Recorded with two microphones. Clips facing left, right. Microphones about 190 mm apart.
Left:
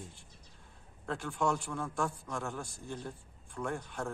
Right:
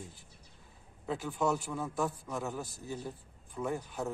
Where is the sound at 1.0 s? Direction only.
5° right (ahead or behind).